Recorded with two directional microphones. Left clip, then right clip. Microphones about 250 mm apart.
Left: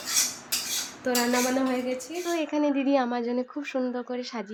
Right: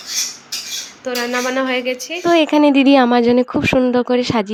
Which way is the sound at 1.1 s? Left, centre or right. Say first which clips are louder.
Right 5 dB; centre.